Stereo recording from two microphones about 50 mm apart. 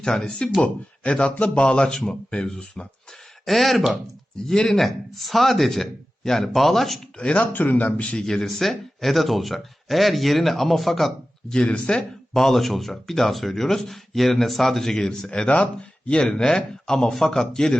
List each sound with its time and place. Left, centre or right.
0.0 s speech: centre
3.4 s speech: centre
7.2 s speech: left
7.5 s speech: left
8.4 s speech: centre
11.5 s speech: centre
12.3 s speech: centre